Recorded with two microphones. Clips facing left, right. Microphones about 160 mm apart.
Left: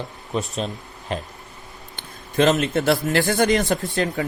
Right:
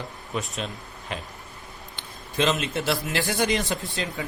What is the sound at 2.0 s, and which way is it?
A man's voice, 50° left (ahead or behind).